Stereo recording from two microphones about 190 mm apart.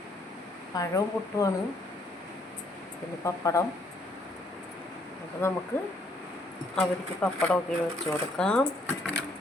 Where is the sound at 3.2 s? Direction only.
15° left (ahead or behind).